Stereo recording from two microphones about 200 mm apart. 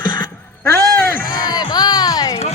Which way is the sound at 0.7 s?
15° left (ahead or behind).